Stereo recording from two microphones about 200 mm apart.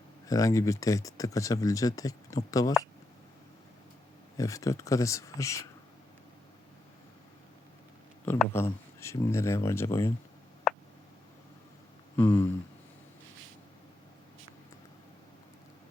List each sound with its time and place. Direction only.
0.3 s speech: 15° left (ahead or behind)
4.4 s speech: 15° left (ahead or behind)
8.2 s speech: 10° left (ahead or behind)
12.1 s a sound: 10° left (ahead or behind)